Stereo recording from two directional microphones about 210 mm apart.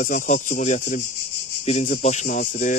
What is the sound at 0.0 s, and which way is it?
Speech, 40° left (ahead or behind).